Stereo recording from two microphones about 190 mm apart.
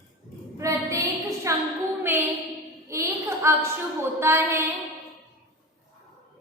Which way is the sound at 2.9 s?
15° right (ahead or behind).